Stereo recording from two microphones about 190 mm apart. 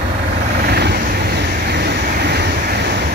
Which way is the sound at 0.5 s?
55° right (ahead or behind).